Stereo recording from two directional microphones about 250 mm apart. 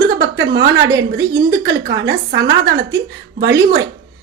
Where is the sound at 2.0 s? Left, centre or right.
Right.